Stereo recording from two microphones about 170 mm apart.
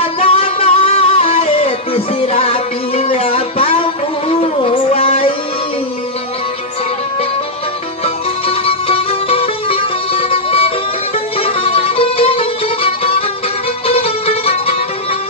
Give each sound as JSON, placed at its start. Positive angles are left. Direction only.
{"t": 0.2, "sound": "music", "side_deg": 30}
{"t": 8.0, "sound": "music", "side_deg": 35}